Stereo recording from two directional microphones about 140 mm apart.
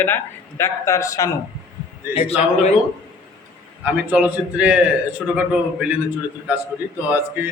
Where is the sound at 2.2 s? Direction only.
50° left (ahead or behind).